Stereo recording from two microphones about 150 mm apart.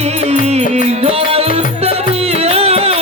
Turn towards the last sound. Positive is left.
turn(degrees=-45)  # may be behind; listen again after turning